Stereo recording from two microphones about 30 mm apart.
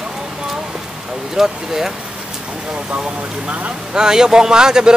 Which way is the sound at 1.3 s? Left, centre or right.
Centre.